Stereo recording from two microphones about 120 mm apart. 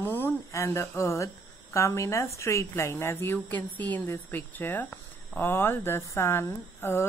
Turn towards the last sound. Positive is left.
turn(degrees=20)  # may be behind; listen again after turning